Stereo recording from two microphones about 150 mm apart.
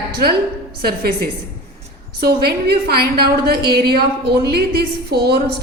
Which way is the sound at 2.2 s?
90° right.